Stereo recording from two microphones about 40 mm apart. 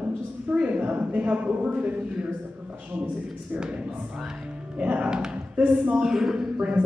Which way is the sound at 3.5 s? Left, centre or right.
Right.